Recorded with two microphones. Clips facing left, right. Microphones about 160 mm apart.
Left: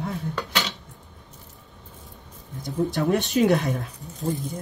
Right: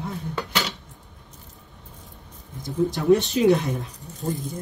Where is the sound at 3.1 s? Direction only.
60° left (ahead or behind).